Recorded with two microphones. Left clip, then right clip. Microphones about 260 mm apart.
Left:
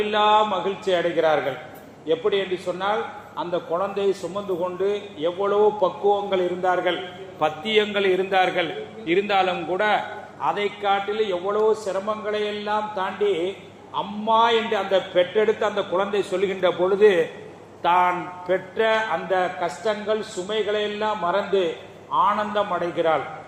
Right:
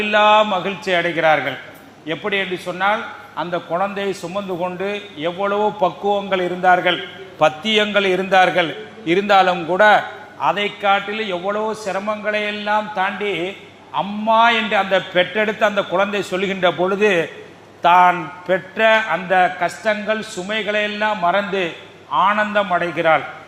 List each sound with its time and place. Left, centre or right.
0.0 s a man's voice: right